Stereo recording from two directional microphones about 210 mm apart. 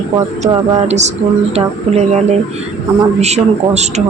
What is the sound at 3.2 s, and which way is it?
Speech, 30° right (ahead or behind).